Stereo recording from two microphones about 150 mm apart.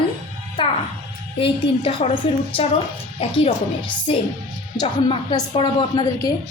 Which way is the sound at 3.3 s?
35° left (ahead or behind).